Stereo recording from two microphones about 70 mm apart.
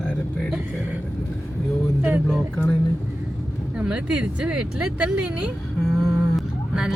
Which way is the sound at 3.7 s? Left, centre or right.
Centre.